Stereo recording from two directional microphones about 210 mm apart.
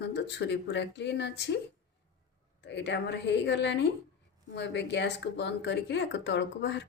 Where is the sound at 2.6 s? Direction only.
55° left (ahead or behind).